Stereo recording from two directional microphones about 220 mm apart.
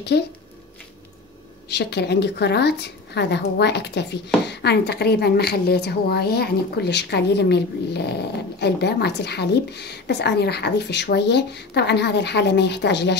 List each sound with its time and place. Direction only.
0.1 s a woman's voice: 45° left (ahead or behind)
1.7 s a woman's voice: 50° left (ahead or behind)